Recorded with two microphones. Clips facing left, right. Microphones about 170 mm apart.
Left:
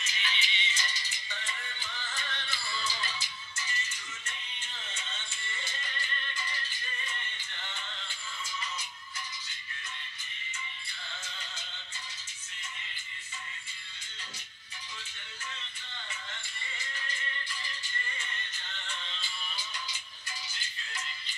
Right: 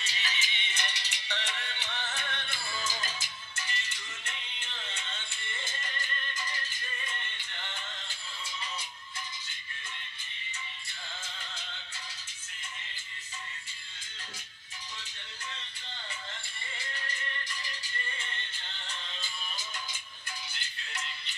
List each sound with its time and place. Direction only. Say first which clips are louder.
0.0 s music: even; 40° right (ahead or behind)